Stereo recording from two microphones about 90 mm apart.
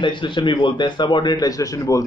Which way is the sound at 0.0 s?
65° left (ahead or behind).